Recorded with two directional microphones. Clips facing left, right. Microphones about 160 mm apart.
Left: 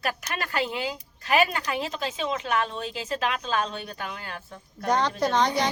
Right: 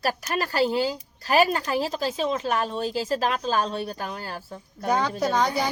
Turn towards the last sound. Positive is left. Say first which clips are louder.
# even
turn(degrees=-5)  # may be behind; listen again after turning